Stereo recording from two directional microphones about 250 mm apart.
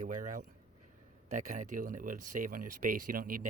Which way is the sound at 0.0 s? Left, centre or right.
Right.